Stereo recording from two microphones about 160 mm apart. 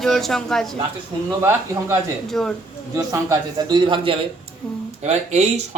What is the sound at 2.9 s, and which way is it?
A man's voice, 20° right (ahead or behind).